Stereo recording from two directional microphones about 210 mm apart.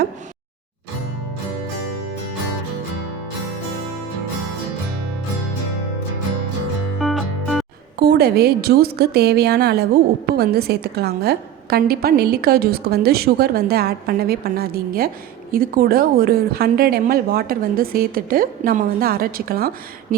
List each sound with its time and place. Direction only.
7.0 s music: centre (ahead or behind)
7.9 s a woman's voice: 50° right (ahead or behind)